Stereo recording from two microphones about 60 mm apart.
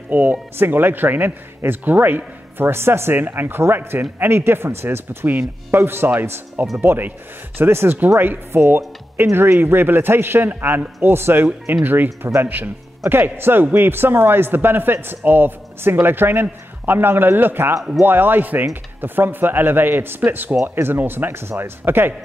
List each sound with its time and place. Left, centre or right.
0.1 s speech: right